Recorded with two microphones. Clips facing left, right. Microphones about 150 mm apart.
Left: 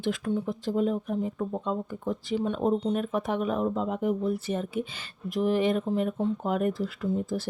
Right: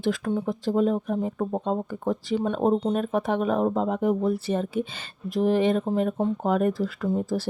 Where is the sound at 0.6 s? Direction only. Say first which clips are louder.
Right 6 dB; 35° right (ahead or behind).